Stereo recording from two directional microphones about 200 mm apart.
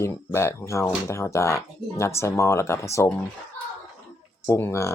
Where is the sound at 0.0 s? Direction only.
15° left (ahead or behind).